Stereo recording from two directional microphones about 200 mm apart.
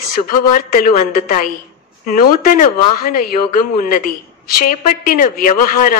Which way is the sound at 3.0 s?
45° left (ahead or behind).